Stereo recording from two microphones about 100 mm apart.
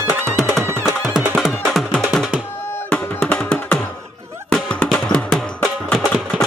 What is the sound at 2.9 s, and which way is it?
Music, 10° left (ahead or behind).